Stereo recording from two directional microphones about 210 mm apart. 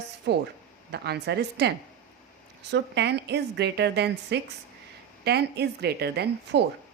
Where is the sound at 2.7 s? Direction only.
55° right (ahead or behind).